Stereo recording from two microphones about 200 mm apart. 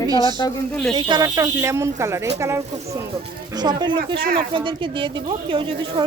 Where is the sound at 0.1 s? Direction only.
20° right (ahead or behind).